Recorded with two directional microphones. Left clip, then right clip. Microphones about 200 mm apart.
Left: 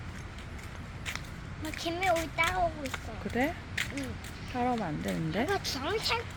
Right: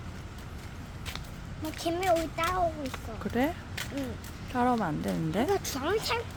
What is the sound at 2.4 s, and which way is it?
Speech, 20° right (ahead or behind).